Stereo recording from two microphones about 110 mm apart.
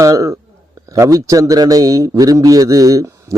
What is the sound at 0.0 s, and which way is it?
A man's voice, 30° right (ahead or behind).